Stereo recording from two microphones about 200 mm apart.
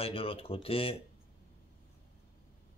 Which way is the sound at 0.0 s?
30° left (ahead or behind).